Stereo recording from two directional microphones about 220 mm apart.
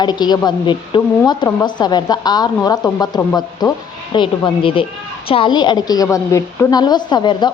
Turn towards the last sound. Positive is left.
turn(degrees=20)  # may be behind; listen again after turning